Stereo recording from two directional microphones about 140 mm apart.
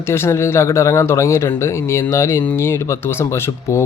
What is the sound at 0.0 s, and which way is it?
Speech, 20° left (ahead or behind).